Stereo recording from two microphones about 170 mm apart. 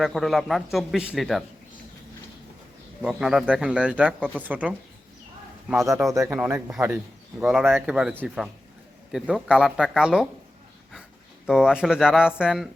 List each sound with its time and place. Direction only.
0.0 s a man's voice: centre (ahead or behind)
3.0 s a man's voice: 5° right (ahead or behind)
6.1 s a man's voice: 15° right (ahead or behind)
11.4 s a man's voice: 5° right (ahead or behind)